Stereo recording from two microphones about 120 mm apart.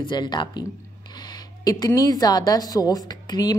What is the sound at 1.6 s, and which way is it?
A woman's voice, 30° left (ahead or behind).